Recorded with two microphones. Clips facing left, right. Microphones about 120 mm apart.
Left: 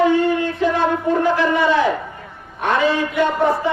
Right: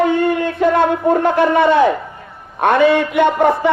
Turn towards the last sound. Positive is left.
turn(degrees=-65)  # may be behind; listen again after turning